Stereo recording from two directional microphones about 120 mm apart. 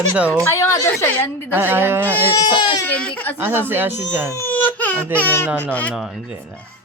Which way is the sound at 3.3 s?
20° right (ahead or behind).